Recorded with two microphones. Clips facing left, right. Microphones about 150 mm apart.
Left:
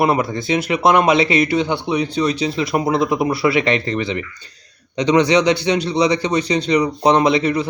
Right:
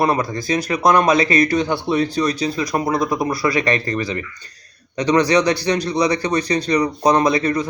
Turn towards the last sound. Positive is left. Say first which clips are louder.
# left 1 dB
turn(degrees=25)  # may be behind; listen again after turning